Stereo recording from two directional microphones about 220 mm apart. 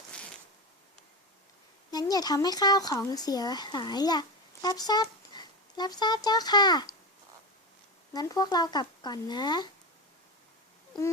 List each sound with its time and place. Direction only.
1.9 s speech: 15° left (ahead or behind)
8.1 s speech: 15° left (ahead or behind)